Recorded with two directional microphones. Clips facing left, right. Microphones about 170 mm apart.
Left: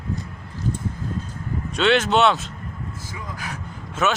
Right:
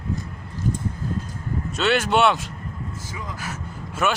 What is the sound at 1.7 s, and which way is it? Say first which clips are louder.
Speech: left 2 dB; 5° right (ahead or behind).